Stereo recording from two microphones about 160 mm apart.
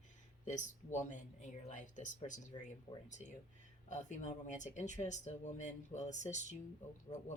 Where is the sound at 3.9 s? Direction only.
50° left (ahead or behind).